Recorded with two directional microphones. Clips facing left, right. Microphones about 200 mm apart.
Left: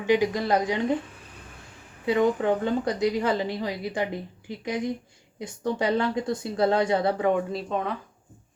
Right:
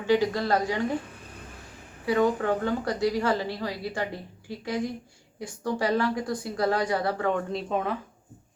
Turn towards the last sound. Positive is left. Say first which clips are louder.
# even
turn(degrees=0)  # may be behind; listen again after turning